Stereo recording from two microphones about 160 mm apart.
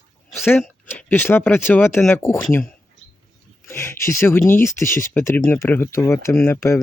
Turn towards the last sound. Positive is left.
turn(degrees=15)  # may be behind; listen again after turning